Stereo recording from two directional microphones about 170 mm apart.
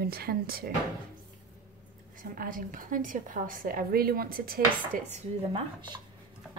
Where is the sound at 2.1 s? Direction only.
55° right (ahead or behind).